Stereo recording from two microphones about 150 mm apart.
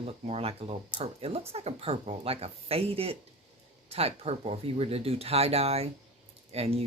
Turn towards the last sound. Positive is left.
turn(degrees=-40)  # may be behind; listen again after turning